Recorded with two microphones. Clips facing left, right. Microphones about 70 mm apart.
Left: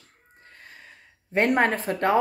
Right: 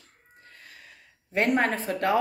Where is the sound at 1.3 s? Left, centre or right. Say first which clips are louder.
Left 3 dB; left.